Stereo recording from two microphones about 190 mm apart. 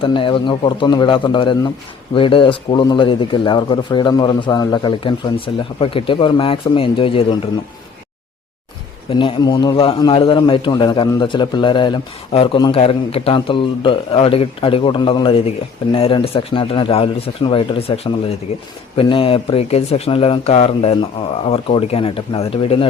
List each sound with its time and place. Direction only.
0.0 s speech: 25° left (ahead or behind)
9.0 s speech: 25° left (ahead or behind)